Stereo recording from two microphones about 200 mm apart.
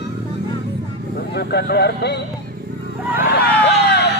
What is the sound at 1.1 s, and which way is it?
Speech, 55° left (ahead or behind).